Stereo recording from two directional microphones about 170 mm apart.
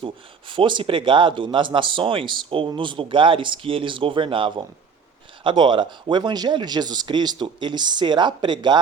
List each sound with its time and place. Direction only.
0.0 s speech: 30° right (ahead or behind)